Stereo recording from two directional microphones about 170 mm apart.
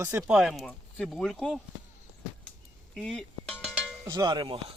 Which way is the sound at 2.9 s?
5° left (ahead or behind).